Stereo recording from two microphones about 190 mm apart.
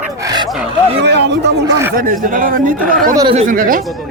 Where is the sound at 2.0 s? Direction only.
45° right (ahead or behind).